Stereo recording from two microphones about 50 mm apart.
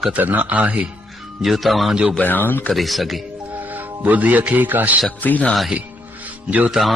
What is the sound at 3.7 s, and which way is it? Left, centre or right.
A man's voice, right.